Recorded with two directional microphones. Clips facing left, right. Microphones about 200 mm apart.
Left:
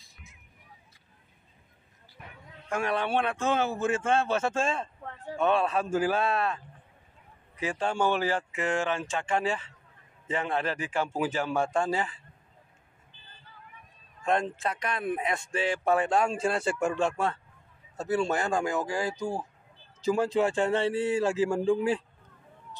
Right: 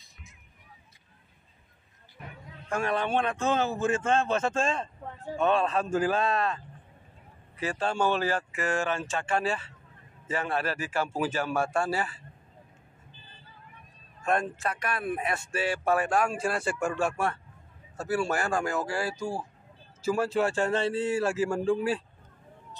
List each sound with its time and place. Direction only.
2.7 s speech: 10° left (ahead or behind)
14.2 s speech: 20° left (ahead or behind)